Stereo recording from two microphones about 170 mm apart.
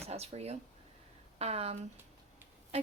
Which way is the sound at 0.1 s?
40° right (ahead or behind).